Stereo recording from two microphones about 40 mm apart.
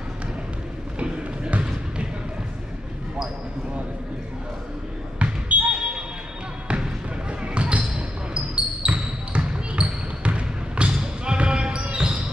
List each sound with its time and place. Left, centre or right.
0.9 s run: right
5.2 s basketball bounce: right